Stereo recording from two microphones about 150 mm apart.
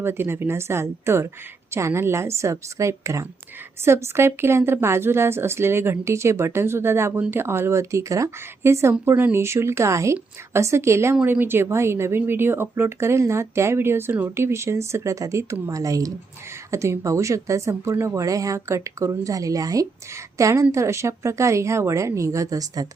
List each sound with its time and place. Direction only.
0.0 s a woman's voice: 15° right (ahead or behind)